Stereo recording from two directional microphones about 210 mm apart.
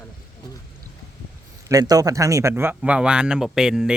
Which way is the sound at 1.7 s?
20° right (ahead or behind).